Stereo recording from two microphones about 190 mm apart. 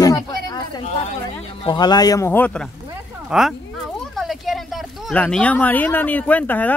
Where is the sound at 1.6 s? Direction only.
20° left (ahead or behind).